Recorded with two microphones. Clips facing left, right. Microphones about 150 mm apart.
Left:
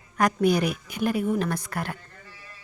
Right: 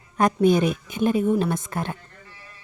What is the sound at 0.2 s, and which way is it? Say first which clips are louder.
Speech: right 3 dB; 25° right (ahead or behind).